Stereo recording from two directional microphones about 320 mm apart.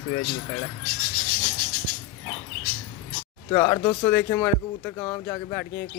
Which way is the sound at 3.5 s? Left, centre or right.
Centre.